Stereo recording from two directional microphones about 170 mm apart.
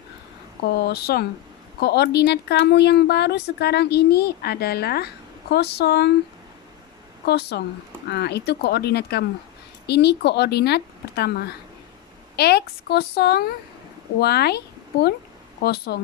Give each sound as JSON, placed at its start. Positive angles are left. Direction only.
{"t": 0.7, "sound": "speech", "side_deg": 70}
{"t": 7.2, "sound": "speech", "side_deg": 75}